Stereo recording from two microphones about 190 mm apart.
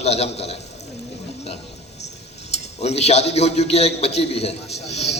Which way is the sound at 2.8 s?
35° left (ahead or behind).